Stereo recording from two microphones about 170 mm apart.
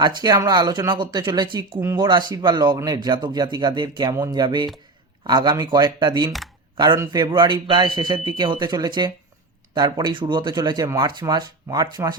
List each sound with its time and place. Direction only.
0.0 s speech: 25° right (ahead or behind)